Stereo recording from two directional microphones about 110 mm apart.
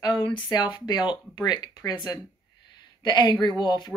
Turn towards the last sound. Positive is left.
turn(degrees=40)  # may be behind; listen again after turning